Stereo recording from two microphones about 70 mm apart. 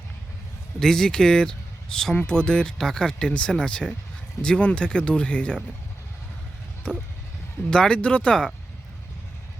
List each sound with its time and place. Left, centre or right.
0.8 s speech: centre
6.8 s speech: centre